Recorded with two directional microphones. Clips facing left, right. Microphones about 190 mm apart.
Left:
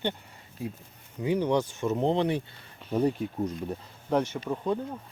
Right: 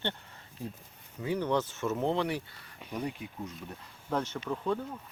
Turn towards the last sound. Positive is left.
turn(degrees=15)  # may be behind; listen again after turning